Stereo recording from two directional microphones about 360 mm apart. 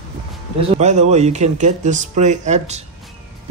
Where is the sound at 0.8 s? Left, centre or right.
Centre.